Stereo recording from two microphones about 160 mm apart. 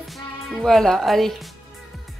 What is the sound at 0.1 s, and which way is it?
Speech, centre (ahead or behind).